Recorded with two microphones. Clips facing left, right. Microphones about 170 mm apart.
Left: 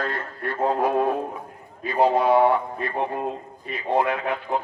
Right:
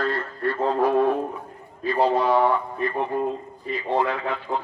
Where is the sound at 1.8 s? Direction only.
25° left (ahead or behind).